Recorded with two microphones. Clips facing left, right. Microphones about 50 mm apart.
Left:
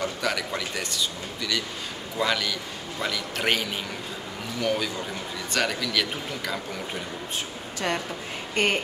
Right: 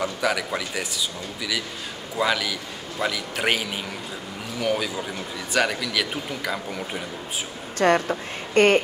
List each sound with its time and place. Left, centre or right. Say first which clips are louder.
0.0 s a man's voice: right 3 dB; centre
7.8 s speech: right 9 dB; right